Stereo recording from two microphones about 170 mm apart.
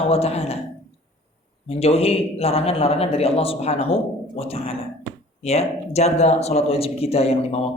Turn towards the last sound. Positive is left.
turn(degrees=35)  # may be behind; listen again after turning